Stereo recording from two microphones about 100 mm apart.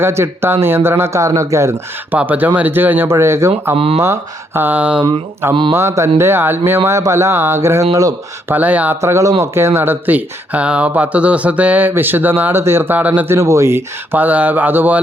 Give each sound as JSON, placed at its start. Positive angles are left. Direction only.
{"t": 0.0, "sound": "speech", "side_deg": -25}
{"t": 2.1, "sound": "speech", "side_deg": -15}
{"t": 3.8, "sound": "speech", "side_deg": -80}
{"t": 4.0, "sound": "speech", "side_deg": -25}
{"t": 5.7, "sound": "speech", "side_deg": -30}
{"t": 8.4, "sound": "speech", "side_deg": -15}
{"t": 9.0, "sound": "speech", "side_deg": -30}
{"t": 13.3, "sound": "speech", "side_deg": -30}